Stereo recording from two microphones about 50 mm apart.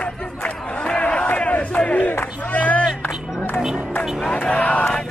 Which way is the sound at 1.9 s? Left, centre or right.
Left.